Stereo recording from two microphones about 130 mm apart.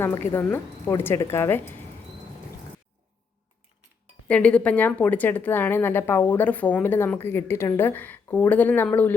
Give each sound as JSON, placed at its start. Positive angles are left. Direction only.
{"t": 0.0, "sound": "a woman's voice", "side_deg": 20}
{"t": 4.3, "sound": "a woman's voice", "side_deg": 10}